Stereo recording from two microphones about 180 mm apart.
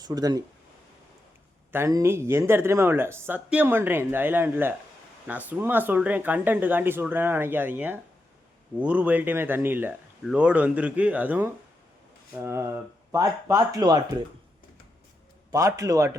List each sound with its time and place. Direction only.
0.0 s speech: 20° right (ahead or behind)
1.7 s speech: 15° right (ahead or behind)
15.5 s speech: 20° right (ahead or behind)